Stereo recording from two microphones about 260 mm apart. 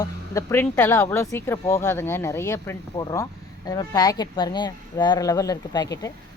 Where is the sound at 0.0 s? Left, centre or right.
Centre.